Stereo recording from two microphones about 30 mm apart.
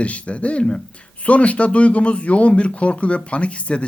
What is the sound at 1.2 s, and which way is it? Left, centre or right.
Speech, left.